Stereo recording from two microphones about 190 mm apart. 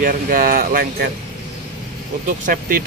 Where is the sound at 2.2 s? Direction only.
45° right (ahead or behind).